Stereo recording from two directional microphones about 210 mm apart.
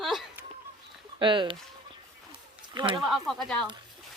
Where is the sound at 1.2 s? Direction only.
25° right (ahead or behind).